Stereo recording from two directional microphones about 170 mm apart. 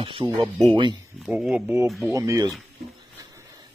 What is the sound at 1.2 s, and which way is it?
Speech, 5° right (ahead or behind).